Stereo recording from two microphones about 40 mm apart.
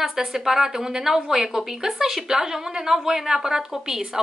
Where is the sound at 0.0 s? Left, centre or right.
Centre.